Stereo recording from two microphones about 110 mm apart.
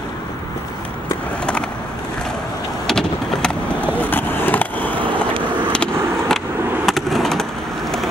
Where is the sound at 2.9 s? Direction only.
5° left (ahead or behind).